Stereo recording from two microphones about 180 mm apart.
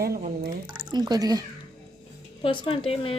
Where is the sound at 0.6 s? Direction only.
25° right (ahead or behind).